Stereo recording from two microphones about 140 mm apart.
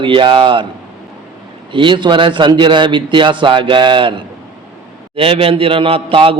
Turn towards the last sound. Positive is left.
turn(degrees=-40)  # may be behind; listen again after turning